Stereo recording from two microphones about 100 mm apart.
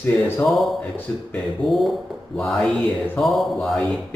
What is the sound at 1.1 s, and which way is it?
Speech, 20° left (ahead or behind).